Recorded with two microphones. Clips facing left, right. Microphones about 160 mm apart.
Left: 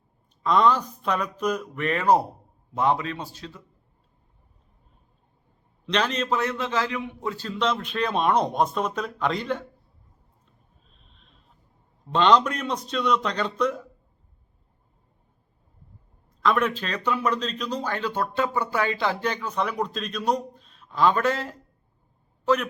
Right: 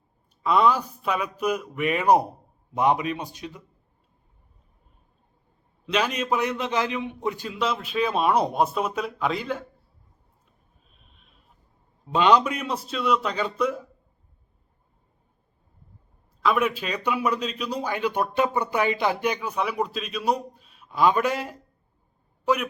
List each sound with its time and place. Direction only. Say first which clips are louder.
0.4 s a man's voice: even; 10° right (ahead or behind)
5.8 s a man's voice: even; 10° right (ahead or behind)
10.9 s a sound: even; 5° right (ahead or behind)
12.0 s a man's voice: even; 10° right (ahead or behind)
16.4 s a man's voice: even; 5° right (ahead or behind)